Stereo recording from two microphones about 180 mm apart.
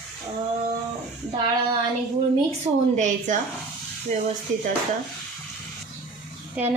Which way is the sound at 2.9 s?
40° right (ahead or behind).